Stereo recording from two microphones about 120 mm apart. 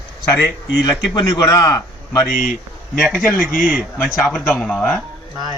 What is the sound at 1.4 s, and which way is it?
Speech, 30° left (ahead or behind).